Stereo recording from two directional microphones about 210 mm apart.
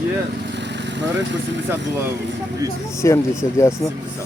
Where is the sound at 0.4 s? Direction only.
55° right (ahead or behind).